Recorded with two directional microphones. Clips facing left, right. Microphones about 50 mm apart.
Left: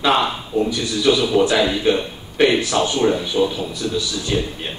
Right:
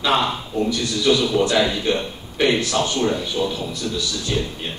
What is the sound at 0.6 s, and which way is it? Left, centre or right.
A man's voice, centre.